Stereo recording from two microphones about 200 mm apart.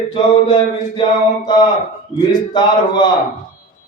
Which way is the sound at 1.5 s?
20° left (ahead or behind).